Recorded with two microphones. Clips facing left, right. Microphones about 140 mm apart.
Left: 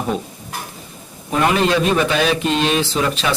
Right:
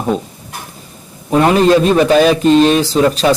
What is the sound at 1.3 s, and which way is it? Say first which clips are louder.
A man's voice: right 7 dB; 35° right (ahead or behind).